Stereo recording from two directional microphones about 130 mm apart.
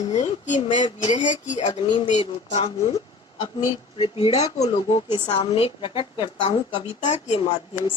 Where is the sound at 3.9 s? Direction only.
40° left (ahead or behind).